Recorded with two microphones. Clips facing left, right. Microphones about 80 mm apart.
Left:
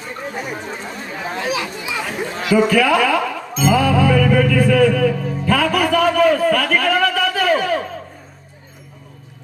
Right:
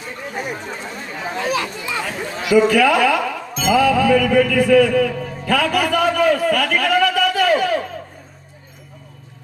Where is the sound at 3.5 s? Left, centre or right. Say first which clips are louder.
Even; left.